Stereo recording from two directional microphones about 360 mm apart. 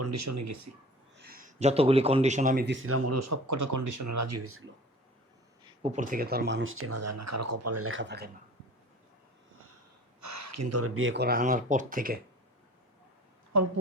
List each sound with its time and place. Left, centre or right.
0.0 s speech: right
1.2 s a man's voice: right
2.8 s speech: right
5.6 s speech: centre
10.2 s speech: right
13.5 s speech: right